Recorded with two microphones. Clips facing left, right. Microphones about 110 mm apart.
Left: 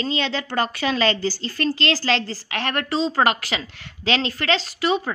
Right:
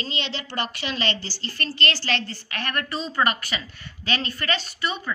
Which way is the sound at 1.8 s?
90° left.